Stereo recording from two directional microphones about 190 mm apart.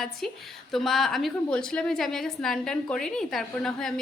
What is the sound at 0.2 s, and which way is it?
A woman's voice, centre (ahead or behind).